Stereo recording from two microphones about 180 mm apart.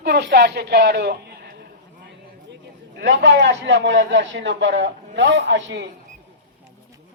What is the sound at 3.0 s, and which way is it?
A man's voice, 70° right (ahead or behind).